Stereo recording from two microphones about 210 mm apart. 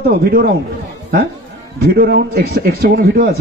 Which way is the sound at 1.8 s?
45° right (ahead or behind).